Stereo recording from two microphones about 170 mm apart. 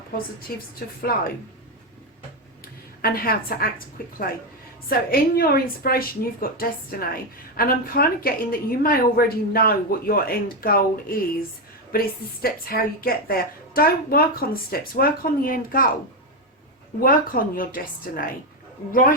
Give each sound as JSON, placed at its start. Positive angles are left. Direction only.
{"t": 0.5, "sound": "a woman's voice", "side_deg": 60}
{"t": 3.0, "sound": "a woman's voice", "side_deg": 60}
{"t": 17.0, "sound": "a woman's voice", "side_deg": 55}